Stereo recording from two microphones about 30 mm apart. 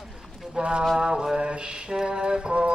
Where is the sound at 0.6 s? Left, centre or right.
Right.